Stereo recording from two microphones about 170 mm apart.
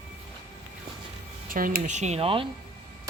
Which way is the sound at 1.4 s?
55° right (ahead or behind).